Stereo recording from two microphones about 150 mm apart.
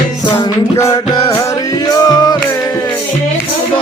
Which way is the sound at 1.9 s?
25° left (ahead or behind).